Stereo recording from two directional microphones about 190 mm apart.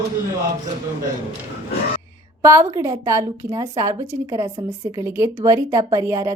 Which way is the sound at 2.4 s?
15° right (ahead or behind).